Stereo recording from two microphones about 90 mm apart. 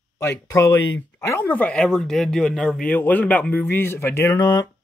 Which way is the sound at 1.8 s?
5° left (ahead or behind).